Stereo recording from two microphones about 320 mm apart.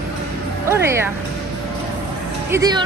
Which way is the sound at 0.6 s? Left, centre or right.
Centre.